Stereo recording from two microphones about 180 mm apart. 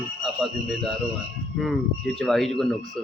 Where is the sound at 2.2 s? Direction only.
Centre (ahead or behind).